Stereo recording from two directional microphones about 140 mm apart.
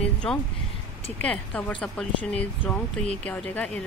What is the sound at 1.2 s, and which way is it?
Speech, 10° left (ahead or behind).